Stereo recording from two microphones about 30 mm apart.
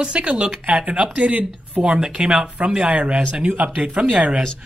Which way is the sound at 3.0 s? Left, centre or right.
Right.